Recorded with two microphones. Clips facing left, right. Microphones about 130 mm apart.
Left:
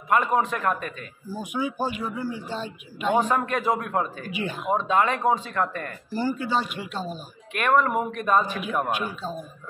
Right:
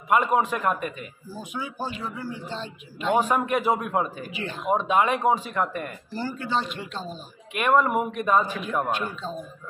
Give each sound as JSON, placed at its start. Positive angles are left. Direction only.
{"t": 0.1, "sound": "speech", "side_deg": -15}
{"t": 1.3, "sound": "a man's voice", "side_deg": 15}
{"t": 3.2, "sound": "speech", "side_deg": -10}
{"t": 4.3, "sound": "a man's voice", "side_deg": 15}
{"t": 4.6, "sound": "speech", "side_deg": -15}
{"t": 6.1, "sound": "a man's voice", "side_deg": 10}
{"t": 7.5, "sound": "speech", "side_deg": -10}
{"t": 8.5, "sound": "a man's voice", "side_deg": 10}